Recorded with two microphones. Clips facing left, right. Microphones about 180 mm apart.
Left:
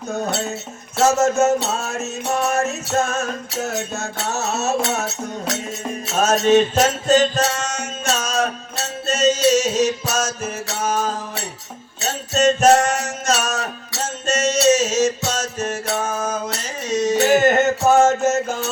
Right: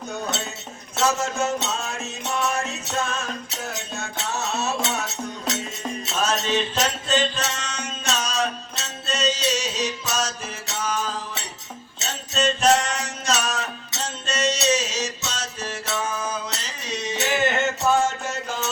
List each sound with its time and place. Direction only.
0.9 s speech: 45° left (ahead or behind)
1.6 s music: 45° left (ahead or behind)